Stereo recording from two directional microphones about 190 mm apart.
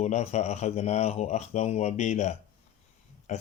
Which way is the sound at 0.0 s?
35° left (ahead or behind).